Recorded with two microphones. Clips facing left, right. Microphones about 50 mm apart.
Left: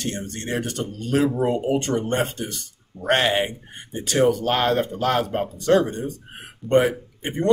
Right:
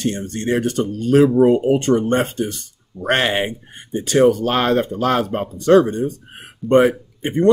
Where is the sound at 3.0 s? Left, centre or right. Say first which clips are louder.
Right 2 dB; right.